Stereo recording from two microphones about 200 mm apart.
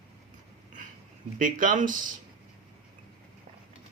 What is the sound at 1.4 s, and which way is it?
Speech, 40° right (ahead or behind).